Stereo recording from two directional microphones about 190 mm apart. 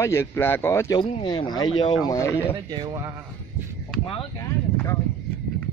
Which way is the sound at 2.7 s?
20° right (ahead or behind).